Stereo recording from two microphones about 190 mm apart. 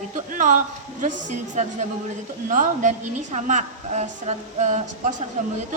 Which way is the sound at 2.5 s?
40° right (ahead or behind).